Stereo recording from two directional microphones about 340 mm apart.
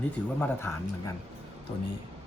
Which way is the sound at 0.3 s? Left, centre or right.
Centre.